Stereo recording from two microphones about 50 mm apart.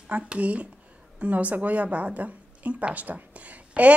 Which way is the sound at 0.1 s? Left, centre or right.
Right.